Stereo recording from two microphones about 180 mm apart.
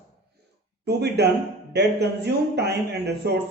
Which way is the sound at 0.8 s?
65° right (ahead or behind).